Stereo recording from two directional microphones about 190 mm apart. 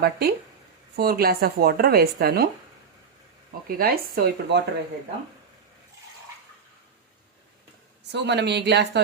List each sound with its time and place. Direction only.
0.0 s speech: 55° right (ahead or behind)
3.7 s speech: 50° right (ahead or behind)
8.1 s speech: 65° right (ahead or behind)